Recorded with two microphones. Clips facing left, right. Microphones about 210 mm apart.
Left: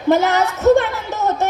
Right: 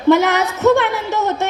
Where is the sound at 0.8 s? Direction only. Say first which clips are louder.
Right 2 dB; 65° right (ahead or behind).